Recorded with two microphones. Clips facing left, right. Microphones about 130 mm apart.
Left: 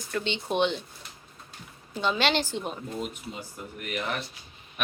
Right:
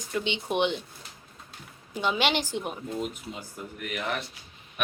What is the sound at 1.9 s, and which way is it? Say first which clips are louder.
Speech: left 1 dB; 15° right (ahead or behind).